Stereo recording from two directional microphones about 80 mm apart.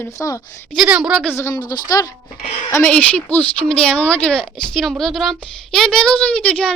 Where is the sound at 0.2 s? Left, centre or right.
Left.